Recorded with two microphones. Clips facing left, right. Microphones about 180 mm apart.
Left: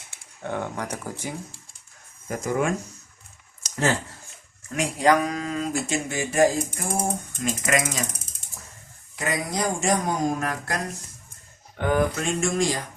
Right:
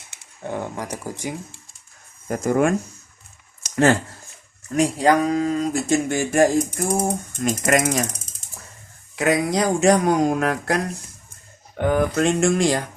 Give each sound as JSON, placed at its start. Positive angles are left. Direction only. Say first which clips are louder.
{"t": 0.4, "sound": "speech", "louder": "right 1 dB", "side_deg": -10}
{"t": 2.2, "sound": "ratchet", "louder": "right 6 dB", "side_deg": -50}
{"t": 3.6, "sound": "a sound", "louder": "right 7 dB", "side_deg": -60}
{"t": 4.7, "sound": "speech", "louder": "right 3 dB", "side_deg": -35}
{"t": 7.4, "sound": "ratchet", "louder": "right 5 dB", "side_deg": -45}
{"t": 9.1, "sound": "speech", "louder": "right 8 dB", "side_deg": -70}
{"t": 11.8, "sound": "speech", "louder": "right 4 dB", "side_deg": -55}
{"t": 12.1, "sound": "speech", "louder": "right 7 dB", "side_deg": -70}